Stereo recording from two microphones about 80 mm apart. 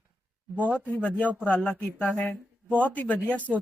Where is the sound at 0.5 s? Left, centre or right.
Centre.